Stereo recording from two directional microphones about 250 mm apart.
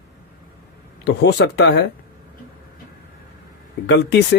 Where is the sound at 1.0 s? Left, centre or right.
Left.